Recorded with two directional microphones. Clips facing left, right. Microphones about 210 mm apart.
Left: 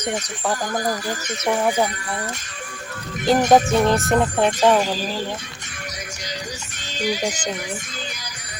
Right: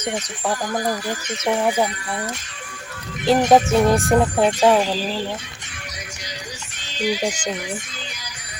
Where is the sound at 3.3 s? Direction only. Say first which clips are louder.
Right 1 dB; centre (ahead or behind).